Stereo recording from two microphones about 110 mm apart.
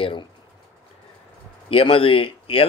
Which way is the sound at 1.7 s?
55° left (ahead or behind).